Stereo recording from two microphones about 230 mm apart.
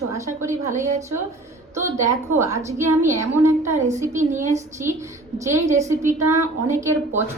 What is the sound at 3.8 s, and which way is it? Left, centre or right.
Speech, right.